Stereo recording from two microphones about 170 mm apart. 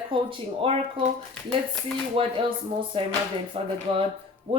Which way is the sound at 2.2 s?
35° right (ahead or behind).